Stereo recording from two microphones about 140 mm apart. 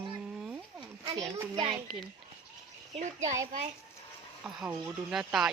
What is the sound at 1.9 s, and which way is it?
Speech, centre (ahead or behind).